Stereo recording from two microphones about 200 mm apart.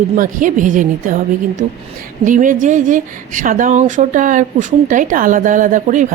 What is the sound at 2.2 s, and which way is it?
A woman's voice, 40° right (ahead or behind).